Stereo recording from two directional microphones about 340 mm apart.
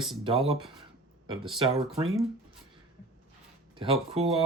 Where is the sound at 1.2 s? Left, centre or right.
Centre.